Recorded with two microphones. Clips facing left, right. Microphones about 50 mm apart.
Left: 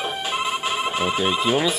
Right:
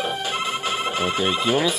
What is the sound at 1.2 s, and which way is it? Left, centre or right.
Speech, centre.